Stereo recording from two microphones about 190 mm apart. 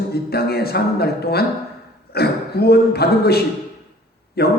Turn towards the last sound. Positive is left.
turn(degrees=55)  # may be behind; listen again after turning